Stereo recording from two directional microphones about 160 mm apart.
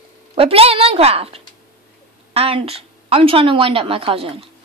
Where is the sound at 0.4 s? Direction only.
35° right (ahead or behind).